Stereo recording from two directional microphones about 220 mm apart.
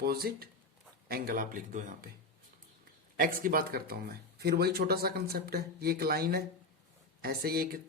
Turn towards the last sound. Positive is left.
turn(degrees=-45)  # may be behind; listen again after turning